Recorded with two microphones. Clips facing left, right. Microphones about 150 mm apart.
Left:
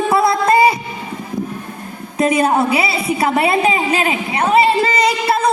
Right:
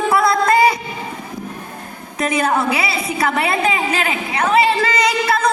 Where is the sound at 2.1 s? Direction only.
30° left (ahead or behind).